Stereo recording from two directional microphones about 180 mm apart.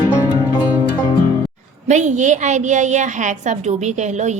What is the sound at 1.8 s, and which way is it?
A woman's voice, 40° right (ahead or behind).